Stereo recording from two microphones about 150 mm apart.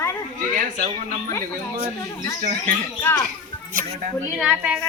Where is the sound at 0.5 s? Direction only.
55° right (ahead or behind).